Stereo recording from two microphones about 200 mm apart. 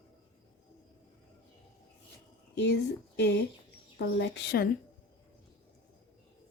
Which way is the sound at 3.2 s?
55° left (ahead or behind).